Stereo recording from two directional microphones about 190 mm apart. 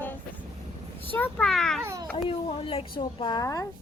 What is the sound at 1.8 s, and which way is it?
Speech, 15° right (ahead or behind).